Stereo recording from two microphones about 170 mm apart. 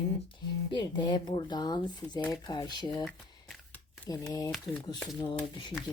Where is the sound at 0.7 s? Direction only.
25° left (ahead or behind).